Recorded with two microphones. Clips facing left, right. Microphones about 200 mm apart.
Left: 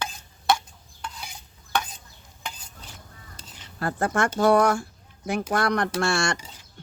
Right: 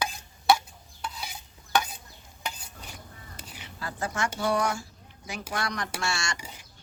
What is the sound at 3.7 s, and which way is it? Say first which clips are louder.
Speech: left 8 dB; 55° left (ahead or behind).